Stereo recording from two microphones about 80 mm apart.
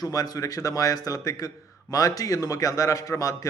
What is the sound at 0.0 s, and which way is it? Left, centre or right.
A man's voice, left.